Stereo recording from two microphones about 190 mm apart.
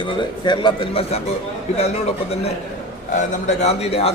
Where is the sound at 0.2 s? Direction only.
25° left (ahead or behind).